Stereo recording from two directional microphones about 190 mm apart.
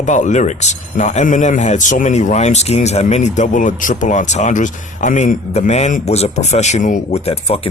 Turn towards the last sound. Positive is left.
turn(degrees=30)  # may be behind; listen again after turning